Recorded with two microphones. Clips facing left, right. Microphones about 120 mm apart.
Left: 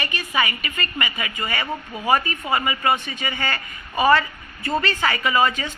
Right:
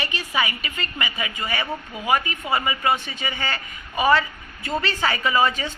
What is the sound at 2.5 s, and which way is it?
A woman's voice, 20° right (ahead or behind).